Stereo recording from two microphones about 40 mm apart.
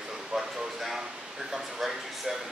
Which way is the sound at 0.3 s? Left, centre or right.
Centre.